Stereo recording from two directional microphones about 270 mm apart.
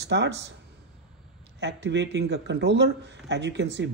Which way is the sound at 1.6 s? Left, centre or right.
Right.